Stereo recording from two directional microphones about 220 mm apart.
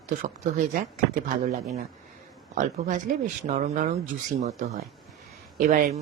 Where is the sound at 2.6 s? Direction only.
35° right (ahead or behind).